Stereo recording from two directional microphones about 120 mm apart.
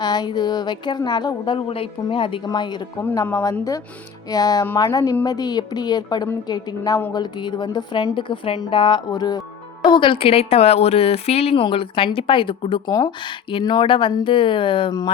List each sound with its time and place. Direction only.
0.0 s a woman's voice: 35° left (ahead or behind)
4.3 s a woman's voice: 30° left (ahead or behind)
9.9 s speech: 45° left (ahead or behind)
11.6 s a woman's voice: 45° left (ahead or behind)